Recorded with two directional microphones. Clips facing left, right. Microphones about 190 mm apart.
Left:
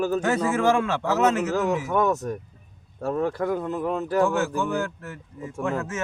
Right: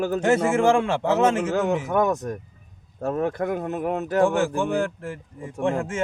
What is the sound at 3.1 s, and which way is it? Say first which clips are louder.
A man's voice: even; 20° right (ahead or behind).